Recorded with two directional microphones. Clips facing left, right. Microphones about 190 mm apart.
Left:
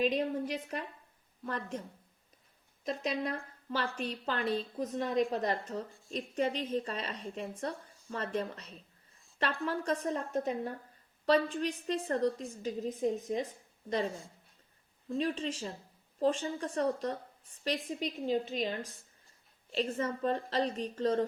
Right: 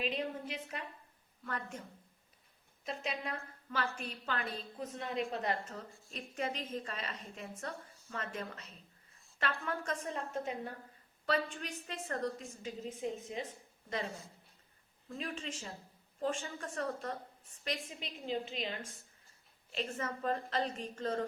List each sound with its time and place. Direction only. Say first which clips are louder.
0.0 s a woman's voice: left 7 dB; 40° left (ahead or behind)
2.8 s a woman's voice: left 6 dB; 40° left (ahead or behind)
15.2 s a woman's voice: left 8 dB; 35° left (ahead or behind)
19.7 s a woman's voice: left 6 dB; 30° left (ahead or behind)